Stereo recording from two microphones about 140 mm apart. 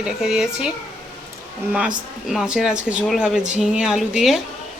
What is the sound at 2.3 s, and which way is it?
Speech, 5° right (ahead or behind).